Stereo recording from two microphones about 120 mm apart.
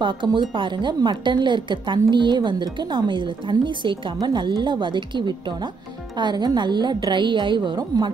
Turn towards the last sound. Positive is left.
turn(degrees=-40)  # may be behind; listen again after turning